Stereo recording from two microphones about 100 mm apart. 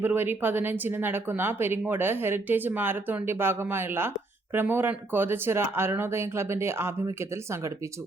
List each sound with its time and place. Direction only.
0.0 s speech: 20° right (ahead or behind)